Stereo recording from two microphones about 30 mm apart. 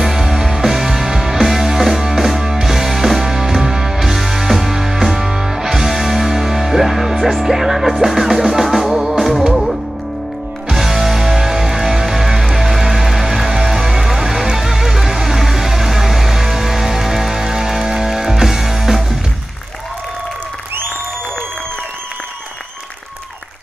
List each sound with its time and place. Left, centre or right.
0.0 s music: centre
10.7 s music: centre